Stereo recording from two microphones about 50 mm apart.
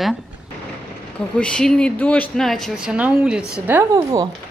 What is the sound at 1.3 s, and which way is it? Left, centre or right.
Speech, centre.